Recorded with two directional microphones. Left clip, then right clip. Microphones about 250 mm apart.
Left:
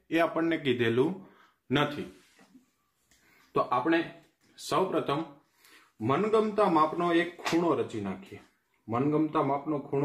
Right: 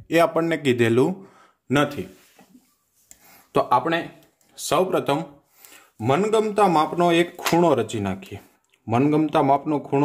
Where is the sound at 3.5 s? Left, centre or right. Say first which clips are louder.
Right 7 dB; right.